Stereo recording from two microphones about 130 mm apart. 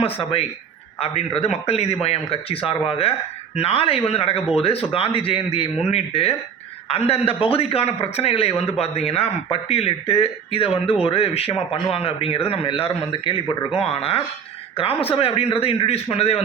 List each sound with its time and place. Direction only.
0.0 s a man's voice: 45° left (ahead or behind)